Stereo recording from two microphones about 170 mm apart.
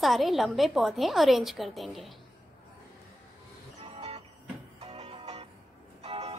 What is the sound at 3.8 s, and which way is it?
Music, 35° right (ahead or behind).